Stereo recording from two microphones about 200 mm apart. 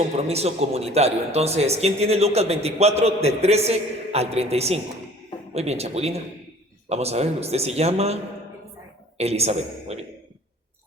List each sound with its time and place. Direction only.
0.2 s speech: 30° right (ahead or behind)